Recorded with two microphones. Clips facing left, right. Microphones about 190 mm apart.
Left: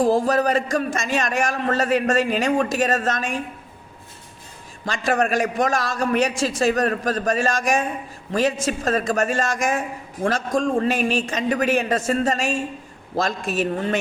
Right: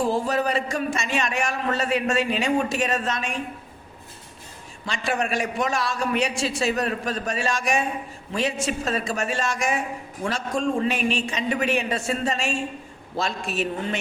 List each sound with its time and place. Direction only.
0.0 s a man's voice: 40° left (ahead or behind)
4.9 s a man's voice: 45° left (ahead or behind)